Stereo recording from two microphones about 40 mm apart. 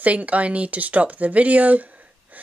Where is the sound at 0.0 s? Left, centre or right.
Right.